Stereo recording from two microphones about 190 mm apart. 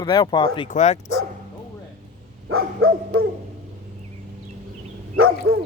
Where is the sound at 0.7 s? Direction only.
35° left (ahead or behind).